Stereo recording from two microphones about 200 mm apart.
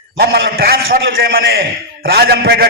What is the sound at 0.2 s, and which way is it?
A man's voice, 50° right (ahead or behind).